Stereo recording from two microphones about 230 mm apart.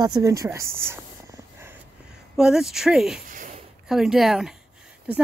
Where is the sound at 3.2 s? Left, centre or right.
Right.